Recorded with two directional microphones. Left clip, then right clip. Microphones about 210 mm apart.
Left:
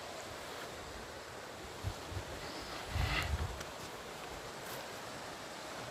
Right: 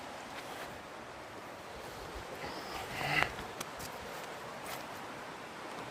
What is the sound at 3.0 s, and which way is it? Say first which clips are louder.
Sniff: right 6 dB; 35° right (ahead or behind).